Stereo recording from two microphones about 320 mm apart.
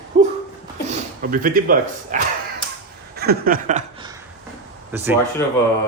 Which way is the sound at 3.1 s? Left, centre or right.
Right.